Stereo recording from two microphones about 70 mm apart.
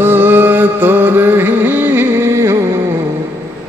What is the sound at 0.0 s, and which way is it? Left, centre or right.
Music, right.